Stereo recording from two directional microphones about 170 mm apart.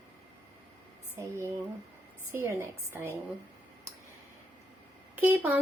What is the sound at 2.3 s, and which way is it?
Speech, 15° right (ahead or behind).